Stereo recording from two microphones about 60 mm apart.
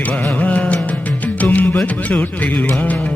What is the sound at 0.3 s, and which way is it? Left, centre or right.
Music, left.